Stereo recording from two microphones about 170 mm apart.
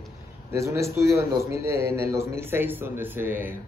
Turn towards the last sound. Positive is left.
turn(degrees=-10)  # may be behind; listen again after turning